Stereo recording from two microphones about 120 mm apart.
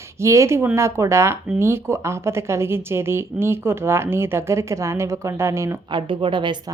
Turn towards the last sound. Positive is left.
turn(degrees=-40)  # may be behind; listen again after turning